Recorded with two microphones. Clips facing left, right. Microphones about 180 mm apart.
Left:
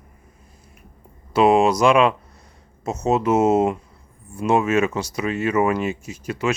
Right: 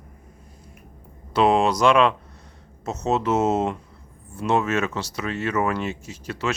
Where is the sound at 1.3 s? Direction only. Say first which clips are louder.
Left 3 dB; 10° left (ahead or behind).